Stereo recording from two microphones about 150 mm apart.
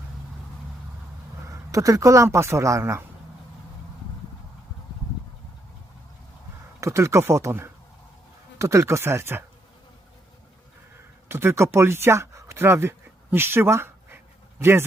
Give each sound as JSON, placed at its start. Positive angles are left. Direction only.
{"t": 1.5, "sound": "speech", "side_deg": -20}
{"t": 6.7, "sound": "speech", "side_deg": -20}
{"t": 11.3, "sound": "speech", "side_deg": -15}